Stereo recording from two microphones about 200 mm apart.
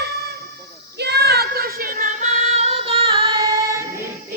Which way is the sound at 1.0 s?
55° right (ahead or behind).